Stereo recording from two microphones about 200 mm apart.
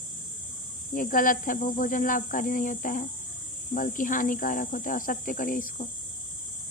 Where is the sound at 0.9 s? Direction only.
45° left (ahead or behind).